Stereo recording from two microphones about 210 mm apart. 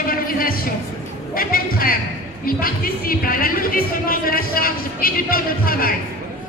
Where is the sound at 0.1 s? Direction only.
45° left (ahead or behind).